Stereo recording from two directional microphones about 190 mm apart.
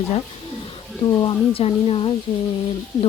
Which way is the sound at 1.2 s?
30° left (ahead or behind).